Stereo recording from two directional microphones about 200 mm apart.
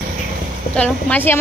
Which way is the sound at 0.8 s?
5° left (ahead or behind).